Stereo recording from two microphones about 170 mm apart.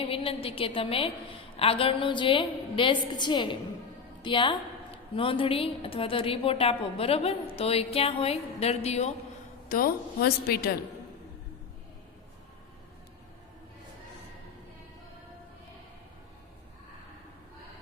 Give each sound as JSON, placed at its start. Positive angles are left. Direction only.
{"t": 0.0, "sound": "a woman's voice", "side_deg": 35}
{"t": 9.6, "sound": "a woman's voice", "side_deg": 60}